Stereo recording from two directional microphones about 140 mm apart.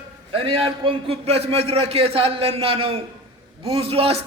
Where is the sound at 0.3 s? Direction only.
40° right (ahead or behind).